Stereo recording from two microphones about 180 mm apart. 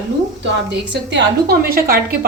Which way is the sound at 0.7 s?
70° right (ahead or behind).